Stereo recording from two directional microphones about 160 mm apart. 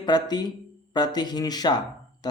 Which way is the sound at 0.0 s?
25° left (ahead or behind).